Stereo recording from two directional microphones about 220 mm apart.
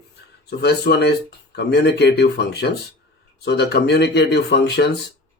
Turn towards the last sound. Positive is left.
turn(degrees=50)  # may be behind; listen again after turning